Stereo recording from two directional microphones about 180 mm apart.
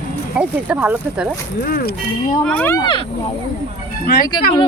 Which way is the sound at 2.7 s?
25° left (ahead or behind).